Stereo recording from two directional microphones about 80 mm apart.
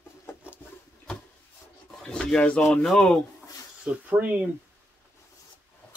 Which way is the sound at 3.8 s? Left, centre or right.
Right.